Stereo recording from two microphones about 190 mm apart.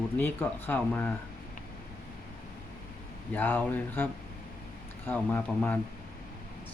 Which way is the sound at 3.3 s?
10° left (ahead or behind).